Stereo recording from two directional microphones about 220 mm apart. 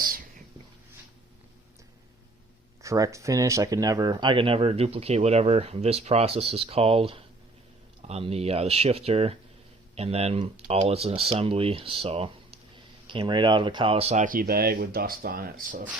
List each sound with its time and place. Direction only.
0.0 s whispering: 40° right (ahead or behind)
2.8 s speech: 15° right (ahead or behind); by 15.9 s 40° right (ahead or behind)